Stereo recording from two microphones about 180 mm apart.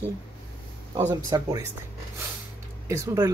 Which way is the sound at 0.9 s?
15° right (ahead or behind).